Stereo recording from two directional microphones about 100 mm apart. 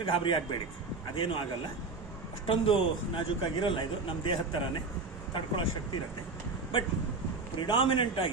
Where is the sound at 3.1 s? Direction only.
55° left (ahead or behind).